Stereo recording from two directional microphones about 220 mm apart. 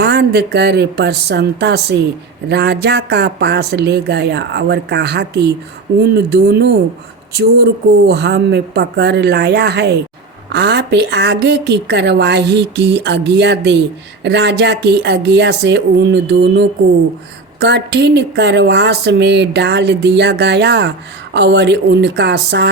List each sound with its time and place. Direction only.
0.0 s a woman's voice: 50° right (ahead or behind)